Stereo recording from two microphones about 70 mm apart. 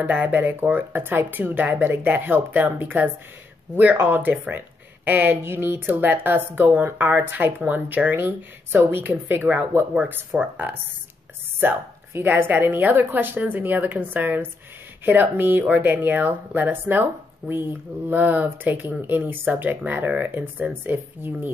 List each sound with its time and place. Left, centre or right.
0.0 s speech: right